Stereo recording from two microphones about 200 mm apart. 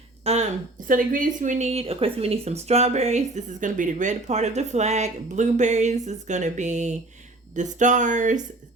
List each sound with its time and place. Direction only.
0.3 s speech: 30° right (ahead or behind)
0.9 s speech: 40° right (ahead or behind)